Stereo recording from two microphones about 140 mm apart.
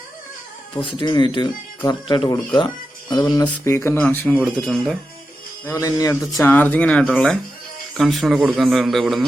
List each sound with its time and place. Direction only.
0.8 s speech: 35° left (ahead or behind); by 4.4 s 15° left (ahead or behind)
4.4 s a man's voice: 5° left (ahead or behind)
5.6 s speech: 25° left (ahead or behind)
6.4 s a man's voice: 15° left (ahead or behind)